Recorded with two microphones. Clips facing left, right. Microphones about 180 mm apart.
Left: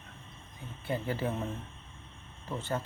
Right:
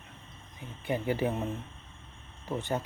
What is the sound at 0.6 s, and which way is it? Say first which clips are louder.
Speech: right 2 dB; 15° right (ahead or behind).